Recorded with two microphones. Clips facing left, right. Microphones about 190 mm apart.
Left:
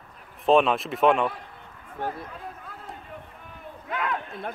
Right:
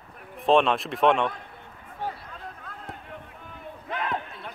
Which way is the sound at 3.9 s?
30° right (ahead or behind).